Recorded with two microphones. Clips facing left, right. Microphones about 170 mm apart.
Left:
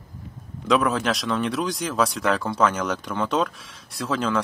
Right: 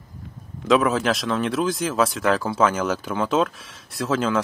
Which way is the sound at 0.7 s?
Centre (ahead or behind).